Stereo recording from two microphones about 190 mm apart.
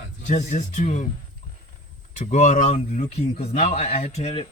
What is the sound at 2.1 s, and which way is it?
Speech, 40° left (ahead or behind).